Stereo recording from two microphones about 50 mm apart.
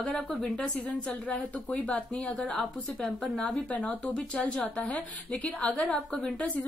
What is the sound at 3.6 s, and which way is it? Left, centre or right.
Speech, left.